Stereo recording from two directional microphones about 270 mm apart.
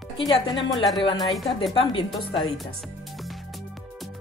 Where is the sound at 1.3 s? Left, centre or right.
Centre.